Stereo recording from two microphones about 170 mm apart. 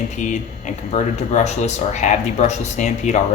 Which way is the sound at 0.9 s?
40° left (ahead or behind).